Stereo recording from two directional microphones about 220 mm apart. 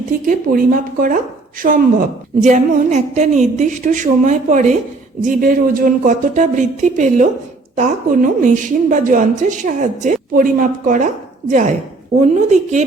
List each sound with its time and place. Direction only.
0.1 s a woman's voice: 40° right (ahead or behind)
12.2 s a woman's voice: 35° right (ahead or behind)